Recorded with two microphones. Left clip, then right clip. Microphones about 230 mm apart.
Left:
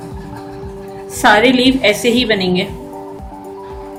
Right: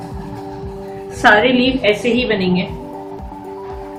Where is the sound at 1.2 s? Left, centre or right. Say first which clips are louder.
Left 1 dB; left.